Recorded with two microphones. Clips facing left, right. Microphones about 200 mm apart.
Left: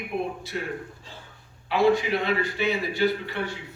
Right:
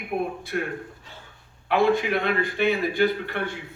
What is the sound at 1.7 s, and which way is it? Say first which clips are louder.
A man's voice: even; 55° right (ahead or behind).